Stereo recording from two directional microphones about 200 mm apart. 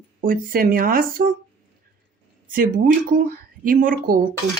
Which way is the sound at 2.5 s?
45° right (ahead or behind).